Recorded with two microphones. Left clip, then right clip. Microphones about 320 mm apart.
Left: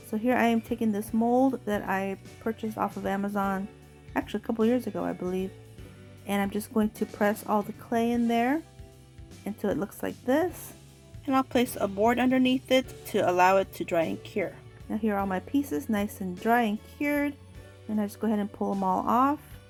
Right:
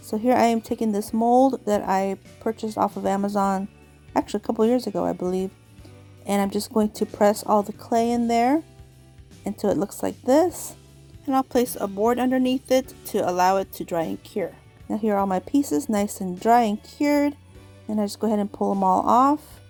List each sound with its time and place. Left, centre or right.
0.1 s speech: right